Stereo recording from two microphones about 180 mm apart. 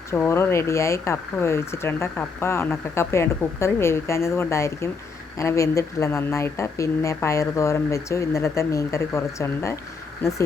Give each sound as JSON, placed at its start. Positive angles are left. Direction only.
{"t": 0.1, "sound": "speech", "side_deg": 15}